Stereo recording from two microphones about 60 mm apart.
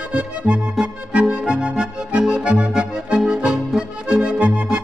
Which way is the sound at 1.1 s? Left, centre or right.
Right.